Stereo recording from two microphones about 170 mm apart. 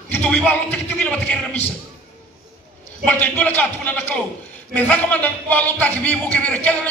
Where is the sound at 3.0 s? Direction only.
10° left (ahead or behind).